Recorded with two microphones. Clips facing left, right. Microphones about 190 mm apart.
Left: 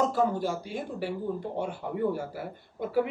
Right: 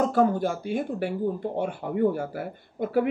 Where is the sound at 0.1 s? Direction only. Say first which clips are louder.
Right 4 dB; 55° right (ahead or behind).